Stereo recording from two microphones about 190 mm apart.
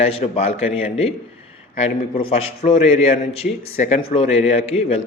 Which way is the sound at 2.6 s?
35° left (ahead or behind).